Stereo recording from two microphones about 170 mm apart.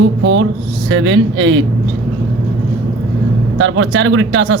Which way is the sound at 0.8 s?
90° right.